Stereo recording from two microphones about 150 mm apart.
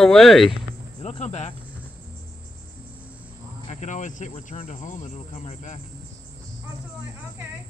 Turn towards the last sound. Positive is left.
turn(degrees=50)  # may be behind; listen again after turning